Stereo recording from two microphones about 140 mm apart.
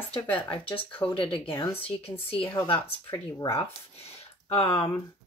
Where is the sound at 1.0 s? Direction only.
40° left (ahead or behind).